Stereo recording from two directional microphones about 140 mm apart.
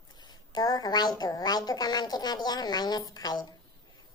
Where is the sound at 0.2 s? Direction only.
30° left (ahead or behind).